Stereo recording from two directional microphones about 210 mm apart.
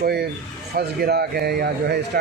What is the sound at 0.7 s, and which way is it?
Speech, 50° right (ahead or behind).